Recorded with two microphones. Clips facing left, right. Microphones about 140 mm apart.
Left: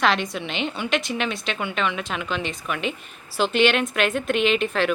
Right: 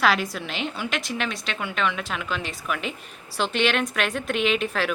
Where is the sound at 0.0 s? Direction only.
5° right (ahead or behind).